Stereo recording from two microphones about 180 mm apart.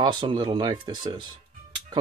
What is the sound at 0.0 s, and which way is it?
Speech, 25° right (ahead or behind).